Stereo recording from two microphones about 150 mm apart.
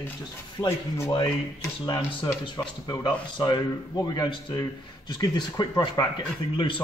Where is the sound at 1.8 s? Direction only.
30° left (ahead or behind).